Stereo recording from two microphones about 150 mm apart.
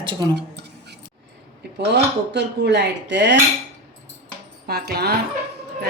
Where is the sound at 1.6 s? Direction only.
90° right.